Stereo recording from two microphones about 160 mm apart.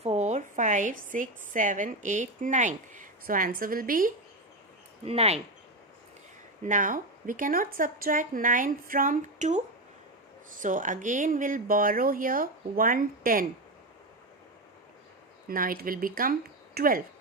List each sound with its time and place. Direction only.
0.0 s a woman's voice: 45° right (ahead or behind); by 4.1 s 60° right (ahead or behind)
5.0 s speech: 40° right (ahead or behind)
6.6 s speech: 55° right (ahead or behind)
15.4 s speech: 60° right (ahead or behind)